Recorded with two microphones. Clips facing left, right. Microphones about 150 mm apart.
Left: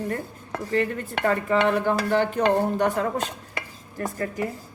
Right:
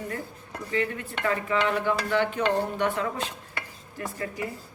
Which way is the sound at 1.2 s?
45° left (ahead or behind).